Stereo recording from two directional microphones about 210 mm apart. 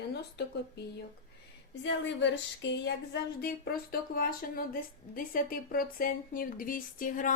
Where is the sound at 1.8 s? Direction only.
60° left (ahead or behind).